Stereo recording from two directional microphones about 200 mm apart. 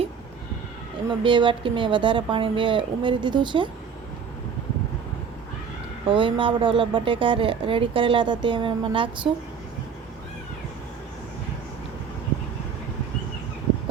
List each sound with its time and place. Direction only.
1.2 s speech: 25° right (ahead or behind)
6.1 s speech: 25° right (ahead or behind)